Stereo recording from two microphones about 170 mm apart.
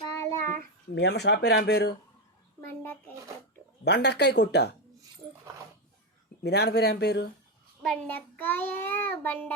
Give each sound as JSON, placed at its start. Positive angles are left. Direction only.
{"t": 0.1, "sound": "child singing", "side_deg": 20}
{"t": 0.9, "sound": "speech", "side_deg": 85}
{"t": 3.8, "sound": "speech", "side_deg": 80}
{"t": 6.4, "sound": "speech", "side_deg": 75}
{"t": 7.8, "sound": "child singing", "side_deg": 5}